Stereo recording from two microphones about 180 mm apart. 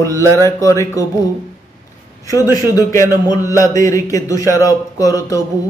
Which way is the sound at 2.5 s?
20° left (ahead or behind).